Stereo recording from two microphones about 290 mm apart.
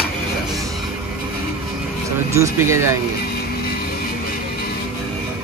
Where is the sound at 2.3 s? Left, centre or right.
Centre.